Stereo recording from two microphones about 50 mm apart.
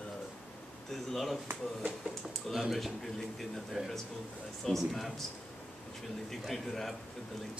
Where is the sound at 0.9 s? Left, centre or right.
Centre.